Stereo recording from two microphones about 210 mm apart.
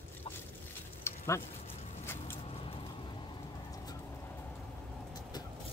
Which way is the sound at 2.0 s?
10° left (ahead or behind).